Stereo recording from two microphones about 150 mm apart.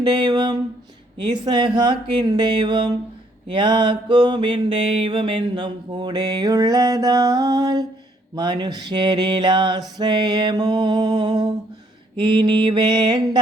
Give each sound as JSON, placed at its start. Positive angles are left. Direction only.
{"t": 0.0, "sound": "mantra", "side_deg": -30}